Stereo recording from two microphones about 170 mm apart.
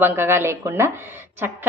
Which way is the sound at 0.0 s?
15° right (ahead or behind).